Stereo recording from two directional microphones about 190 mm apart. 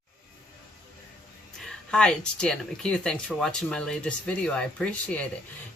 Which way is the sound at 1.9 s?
5° left (ahead or behind).